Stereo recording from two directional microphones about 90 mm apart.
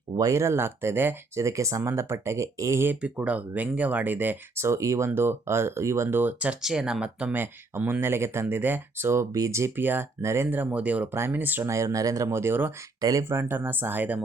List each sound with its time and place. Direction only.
0.2 s speech: 35° right (ahead or behind)
3.2 s speech: 15° right (ahead or behind)
7.3 s speech: 25° right (ahead or behind)
11.7 s speech: 35° right (ahead or behind)
13.0 s speech: 45° right (ahead or behind)
13.2 s speech: 25° right (ahead or behind)